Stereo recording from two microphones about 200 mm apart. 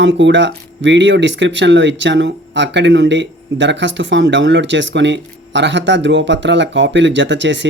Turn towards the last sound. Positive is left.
turn(degrees=-65)  # may be behind; listen again after turning